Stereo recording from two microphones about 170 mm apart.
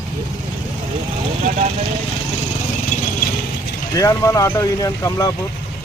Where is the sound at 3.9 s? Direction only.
20° left (ahead or behind).